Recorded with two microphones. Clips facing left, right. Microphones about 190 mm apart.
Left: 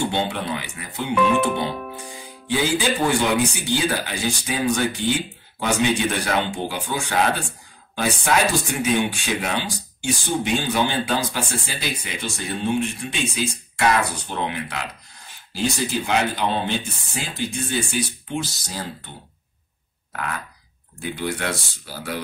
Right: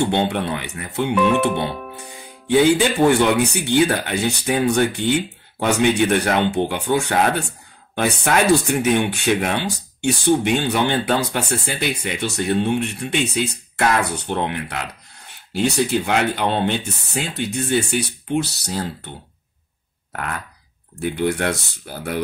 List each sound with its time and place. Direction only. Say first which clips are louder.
0.1 s speech: right 4 dB; 60° right (ahead or behind)
21.0 s speech: right 6 dB; 60° right (ahead or behind)